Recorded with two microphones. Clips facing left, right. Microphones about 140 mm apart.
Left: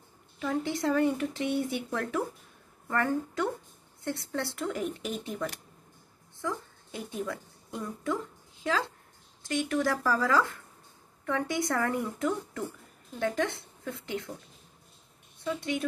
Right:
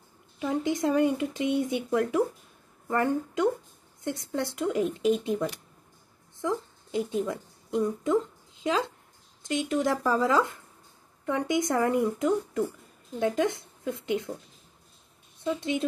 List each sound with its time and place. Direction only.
0.4 s a woman's voice: 20° right (ahead or behind)
15.4 s speech: 20° right (ahead or behind)